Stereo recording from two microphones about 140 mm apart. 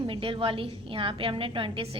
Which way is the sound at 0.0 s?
40° right (ahead or behind).